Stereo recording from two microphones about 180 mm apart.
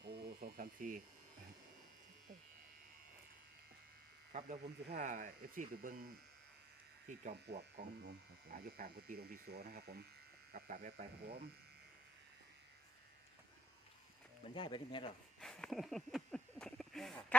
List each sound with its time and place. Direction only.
0.0 s a sound: 65° right (ahead or behind)
4.3 s speech: 45° right (ahead or behind)
4.9 s speech: 55° right (ahead or behind)
7.1 s speech: 40° right (ahead or behind)
7.4 s speech: 65° right (ahead or behind)
8.4 s speech: 55° right (ahead or behind)
10.5 s speech: 50° right (ahead or behind)
14.5 s speech: 25° left (ahead or behind)
15.4 s speech: 5° left (ahead or behind)